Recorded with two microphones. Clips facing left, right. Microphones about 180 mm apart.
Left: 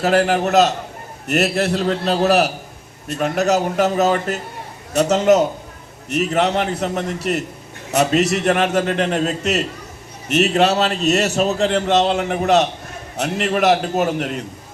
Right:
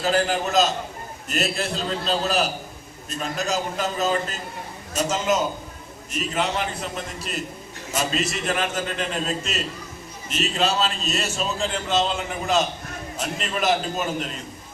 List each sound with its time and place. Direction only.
0.0 s a man's voice: 65° left (ahead or behind)